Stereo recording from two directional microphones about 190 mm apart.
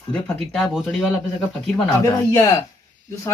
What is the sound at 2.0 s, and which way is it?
Speech, 15° left (ahead or behind).